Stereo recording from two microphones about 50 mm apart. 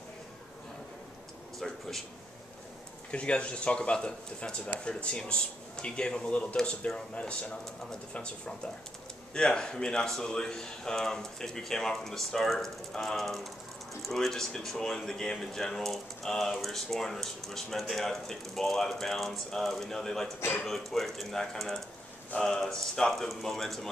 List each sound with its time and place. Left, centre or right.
1.6 s speech: centre
3.1 s speech: left; by 23.9 s centre